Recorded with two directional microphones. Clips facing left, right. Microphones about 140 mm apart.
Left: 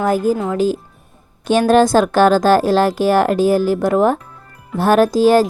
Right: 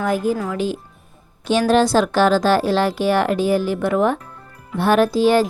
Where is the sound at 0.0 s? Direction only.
40° left (ahead or behind).